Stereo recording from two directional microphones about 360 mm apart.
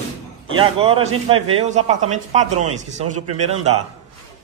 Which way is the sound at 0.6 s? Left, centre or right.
Centre.